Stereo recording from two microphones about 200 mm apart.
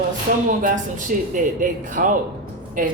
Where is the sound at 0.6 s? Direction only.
40° right (ahead or behind).